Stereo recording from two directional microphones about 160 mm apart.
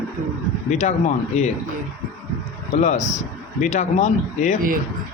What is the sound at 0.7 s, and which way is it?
Speech, 45° left (ahead or behind).